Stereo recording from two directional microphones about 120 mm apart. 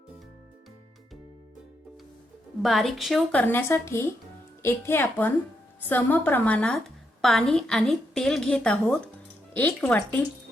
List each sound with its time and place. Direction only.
2.6 s a woman's voice: centre (ahead or behind)
3.3 s a woman's voice: 15° left (ahead or behind)